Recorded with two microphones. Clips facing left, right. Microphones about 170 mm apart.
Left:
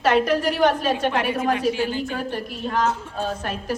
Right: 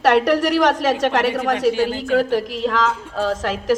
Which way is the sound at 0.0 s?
70° right (ahead or behind).